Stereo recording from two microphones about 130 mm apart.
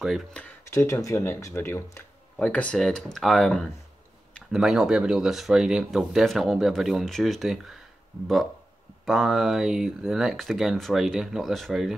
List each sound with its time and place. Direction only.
0.0 s speech: centre (ahead or behind)
0.7 s speech: 25° left (ahead or behind)
2.3 s speech: 10° left (ahead or behind)
9.0 s speech: centre (ahead or behind)